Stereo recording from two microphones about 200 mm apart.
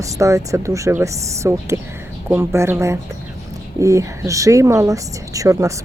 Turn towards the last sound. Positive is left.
turn(degrees=-15)  # may be behind; listen again after turning